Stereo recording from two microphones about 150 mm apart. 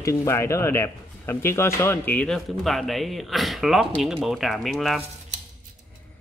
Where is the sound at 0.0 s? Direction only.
20° left (ahead or behind); by 5.0 s centre (ahead or behind).